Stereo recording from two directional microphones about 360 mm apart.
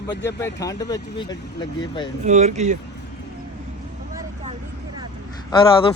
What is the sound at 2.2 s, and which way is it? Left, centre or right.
Speech, centre.